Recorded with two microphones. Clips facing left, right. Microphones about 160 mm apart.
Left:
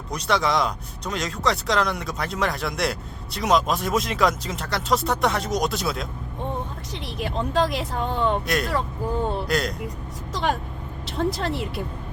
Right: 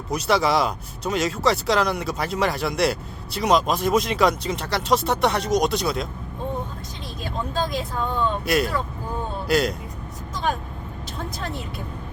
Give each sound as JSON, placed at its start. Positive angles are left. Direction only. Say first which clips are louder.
{"t": 0.1, "sound": "speech", "louder": "right 2 dB", "side_deg": -5}
{"t": 7.2, "sound": "speech", "louder": "left 4 dB", "side_deg": 75}
{"t": 8.4, "sound": "speech", "louder": "right 2 dB", "side_deg": -5}
{"t": 10.3, "sound": "vehicle", "louder": "left 1 dB", "side_deg": 75}
{"t": 11.3, "sound": "speech", "louder": "left 5 dB", "side_deg": 75}